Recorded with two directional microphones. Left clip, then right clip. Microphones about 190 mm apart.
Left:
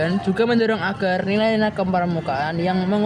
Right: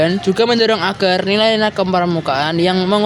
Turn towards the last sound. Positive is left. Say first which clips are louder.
# right 7 dB
turn(degrees=-45)  # may be behind; listen again after turning